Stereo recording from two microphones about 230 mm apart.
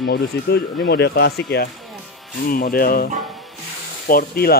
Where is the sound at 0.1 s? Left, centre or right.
Left.